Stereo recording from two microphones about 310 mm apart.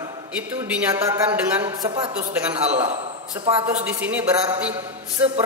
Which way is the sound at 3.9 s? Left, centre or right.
Centre.